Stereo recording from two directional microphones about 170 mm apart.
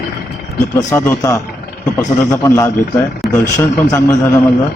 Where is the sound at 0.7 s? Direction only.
15° left (ahead or behind).